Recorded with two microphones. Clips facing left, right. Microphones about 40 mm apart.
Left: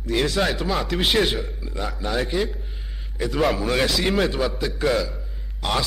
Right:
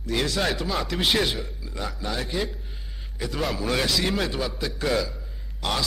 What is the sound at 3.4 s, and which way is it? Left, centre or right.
Speech, centre.